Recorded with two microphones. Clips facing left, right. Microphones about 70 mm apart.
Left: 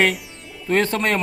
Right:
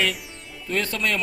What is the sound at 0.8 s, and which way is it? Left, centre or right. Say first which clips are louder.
Speech: left 2 dB; left.